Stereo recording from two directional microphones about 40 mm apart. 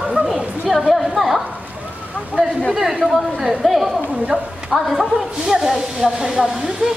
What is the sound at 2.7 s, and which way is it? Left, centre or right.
Speech, centre.